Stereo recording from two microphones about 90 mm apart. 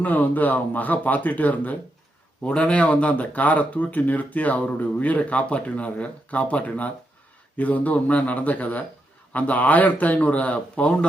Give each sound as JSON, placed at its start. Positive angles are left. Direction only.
{"t": 0.0, "sound": "speech", "side_deg": 20}